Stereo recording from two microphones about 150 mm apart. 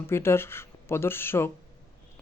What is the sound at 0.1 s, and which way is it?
Speech, 15° left (ahead or behind).